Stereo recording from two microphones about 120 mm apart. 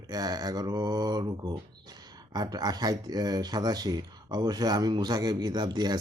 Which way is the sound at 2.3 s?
35° right (ahead or behind).